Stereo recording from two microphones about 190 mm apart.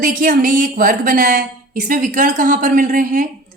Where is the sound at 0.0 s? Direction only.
45° right (ahead or behind).